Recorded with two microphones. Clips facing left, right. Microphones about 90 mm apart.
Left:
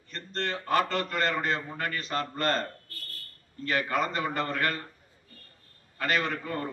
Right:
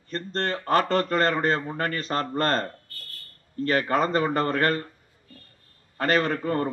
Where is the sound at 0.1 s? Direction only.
40° right (ahead or behind).